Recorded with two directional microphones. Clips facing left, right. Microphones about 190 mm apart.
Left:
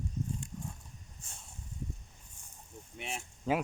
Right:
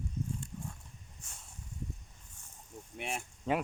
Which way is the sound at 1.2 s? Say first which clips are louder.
Left 1 dB; 30° left (ahead or behind).